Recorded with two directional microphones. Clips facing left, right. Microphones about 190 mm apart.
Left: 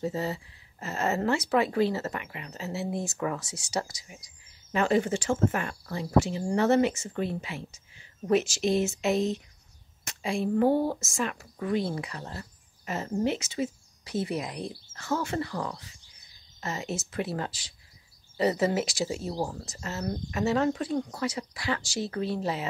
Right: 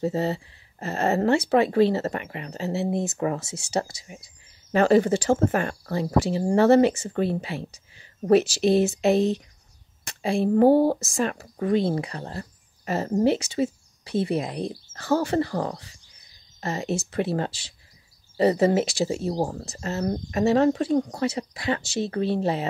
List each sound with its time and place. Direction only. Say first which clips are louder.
0.0 s speech: right 6 dB; 30° right (ahead or behind)
4.7 s speech: right 7 dB; 35° right (ahead or behind)
14.7 s speech: right 9 dB; 40° right (ahead or behind)